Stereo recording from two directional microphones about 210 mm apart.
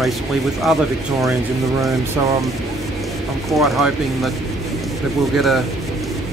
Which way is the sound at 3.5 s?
Centre (ahead or behind).